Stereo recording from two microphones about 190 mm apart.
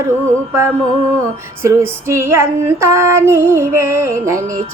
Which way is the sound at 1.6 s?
15° right (ahead or behind).